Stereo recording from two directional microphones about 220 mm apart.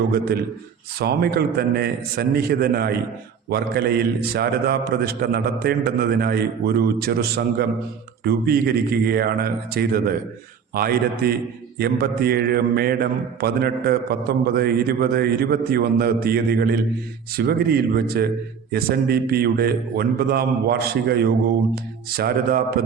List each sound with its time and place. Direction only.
0.9 s mantra: 45° right (ahead or behind)